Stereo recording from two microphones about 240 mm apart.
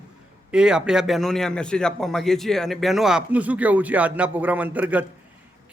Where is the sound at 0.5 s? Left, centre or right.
Centre.